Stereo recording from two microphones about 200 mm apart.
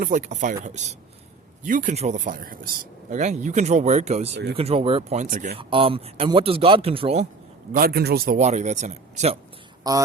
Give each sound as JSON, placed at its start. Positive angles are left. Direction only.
{"t": 0.0, "sound": "speech", "side_deg": -40}
{"t": 5.5, "sound": "a man's voice", "side_deg": -25}
{"t": 7.7, "sound": "speech", "side_deg": -50}
{"t": 9.8, "sound": "speech", "side_deg": -20}